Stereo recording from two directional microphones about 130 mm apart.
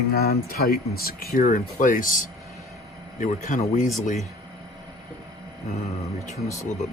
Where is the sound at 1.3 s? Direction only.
90° left.